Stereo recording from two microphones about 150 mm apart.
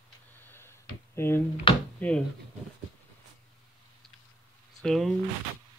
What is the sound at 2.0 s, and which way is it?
Speech, 10° left (ahead or behind).